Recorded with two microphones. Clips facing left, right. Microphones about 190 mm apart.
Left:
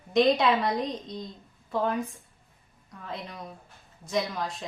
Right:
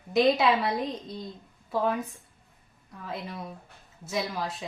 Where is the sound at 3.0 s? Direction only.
5° right (ahead or behind).